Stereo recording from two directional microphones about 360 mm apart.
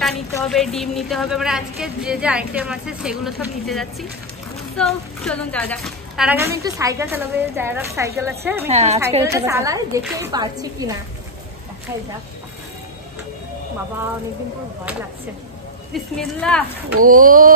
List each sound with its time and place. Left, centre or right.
0.0 s a woman's voice: centre
8.6 s a woman's voice: centre
15.9 s a woman's voice: centre
17.0 s speech: right